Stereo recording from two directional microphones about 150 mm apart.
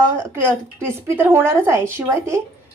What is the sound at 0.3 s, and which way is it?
A woman's voice, 15° right (ahead or behind).